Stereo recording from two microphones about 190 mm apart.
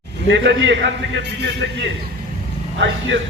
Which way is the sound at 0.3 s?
70° right (ahead or behind).